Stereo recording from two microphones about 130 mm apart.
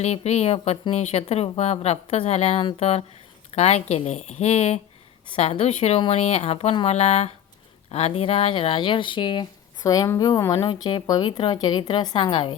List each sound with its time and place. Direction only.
0.0 s speech: 55° left (ahead or behind); by 9.5 s 40° left (ahead or behind)
9.8 s speech: 30° left (ahead or behind)